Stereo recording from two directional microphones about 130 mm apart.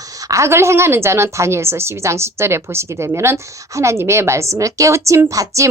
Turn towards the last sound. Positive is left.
turn(degrees=-25)  # may be behind; listen again after turning